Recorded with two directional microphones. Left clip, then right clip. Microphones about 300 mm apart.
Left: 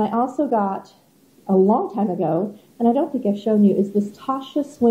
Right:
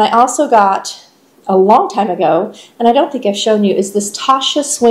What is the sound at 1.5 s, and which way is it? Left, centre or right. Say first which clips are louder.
Speech: right 9 dB; centre.